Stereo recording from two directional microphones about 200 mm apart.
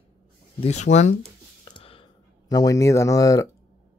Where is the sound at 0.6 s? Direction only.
35° left (ahead or behind).